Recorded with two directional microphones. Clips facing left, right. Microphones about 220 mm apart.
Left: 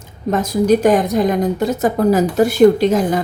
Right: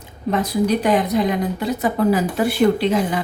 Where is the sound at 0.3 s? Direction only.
45° left (ahead or behind).